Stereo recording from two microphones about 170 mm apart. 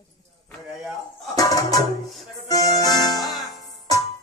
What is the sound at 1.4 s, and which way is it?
Music, 20° left (ahead or behind).